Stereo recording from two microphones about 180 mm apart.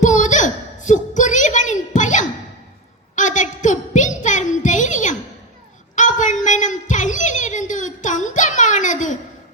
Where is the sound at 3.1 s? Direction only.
45° left (ahead or behind).